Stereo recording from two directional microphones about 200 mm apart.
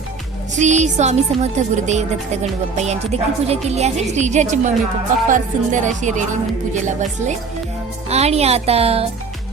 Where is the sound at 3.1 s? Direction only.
30° right (ahead or behind).